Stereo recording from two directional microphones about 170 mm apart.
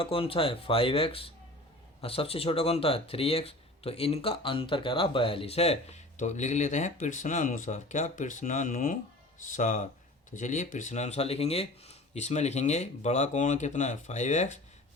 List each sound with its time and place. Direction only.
0.0 s speech: 35° left (ahead or behind)